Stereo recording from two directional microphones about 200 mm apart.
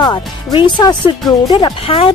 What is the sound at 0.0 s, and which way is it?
Speech, 20° left (ahead or behind).